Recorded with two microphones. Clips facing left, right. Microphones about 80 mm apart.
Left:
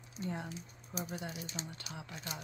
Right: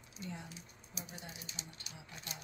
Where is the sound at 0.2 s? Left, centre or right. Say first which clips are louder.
Left 7 dB; left.